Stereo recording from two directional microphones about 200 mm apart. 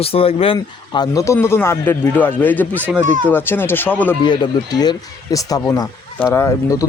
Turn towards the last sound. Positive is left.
turn(degrees=15)  # may be behind; listen again after turning